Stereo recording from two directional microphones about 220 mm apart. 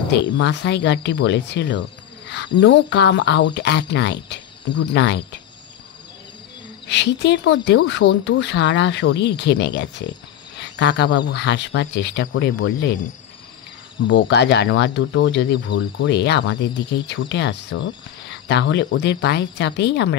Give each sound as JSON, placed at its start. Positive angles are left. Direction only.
{"t": 0.1, "sound": "speech", "side_deg": 50}
{"t": 6.9, "sound": "speech", "side_deg": 50}
{"t": 14.0, "sound": "speech", "side_deg": 55}